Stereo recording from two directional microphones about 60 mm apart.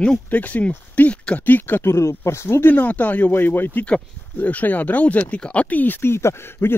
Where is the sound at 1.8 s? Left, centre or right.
Left.